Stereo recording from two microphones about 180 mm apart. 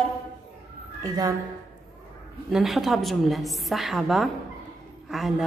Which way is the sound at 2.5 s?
Centre (ahead or behind).